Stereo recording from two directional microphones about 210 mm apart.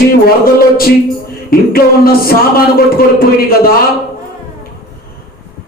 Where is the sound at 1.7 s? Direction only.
45° left (ahead or behind).